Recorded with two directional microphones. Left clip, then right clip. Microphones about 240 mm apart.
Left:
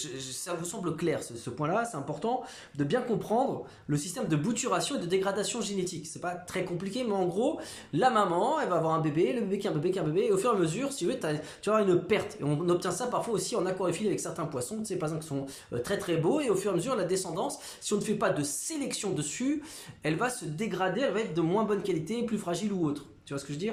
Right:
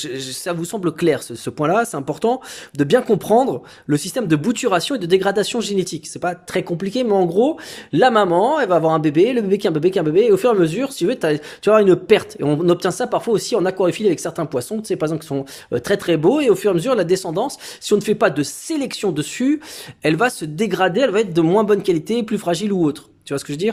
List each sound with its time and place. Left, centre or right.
0.0 s speech: right